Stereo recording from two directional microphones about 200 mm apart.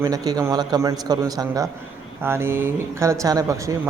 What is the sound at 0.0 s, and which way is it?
A man's voice, 20° right (ahead or behind).